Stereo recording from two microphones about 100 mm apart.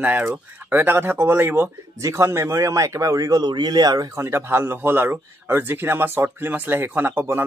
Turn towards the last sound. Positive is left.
turn(degrees=-25)  # may be behind; listen again after turning